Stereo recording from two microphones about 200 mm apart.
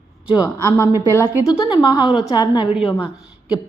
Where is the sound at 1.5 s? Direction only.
20° left (ahead or behind).